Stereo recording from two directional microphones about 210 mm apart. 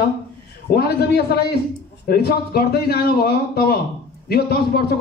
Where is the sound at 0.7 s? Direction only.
50° left (ahead or behind).